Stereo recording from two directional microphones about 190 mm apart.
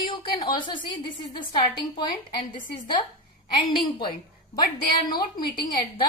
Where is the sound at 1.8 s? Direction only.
25° left (ahead or behind).